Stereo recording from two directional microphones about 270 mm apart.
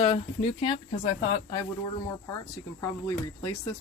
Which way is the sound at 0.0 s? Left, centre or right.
Left.